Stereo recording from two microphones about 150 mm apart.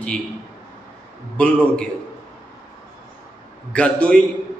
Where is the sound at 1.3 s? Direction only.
5° left (ahead or behind).